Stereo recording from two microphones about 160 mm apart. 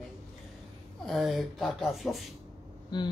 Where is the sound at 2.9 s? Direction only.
30° left (ahead or behind).